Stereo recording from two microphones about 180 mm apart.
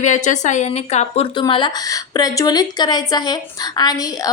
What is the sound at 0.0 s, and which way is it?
A woman's voice, 45° left (ahead or behind).